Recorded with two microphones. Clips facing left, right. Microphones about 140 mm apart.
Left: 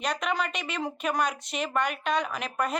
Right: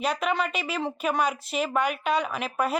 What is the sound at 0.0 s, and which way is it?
Speech, 5° right (ahead or behind).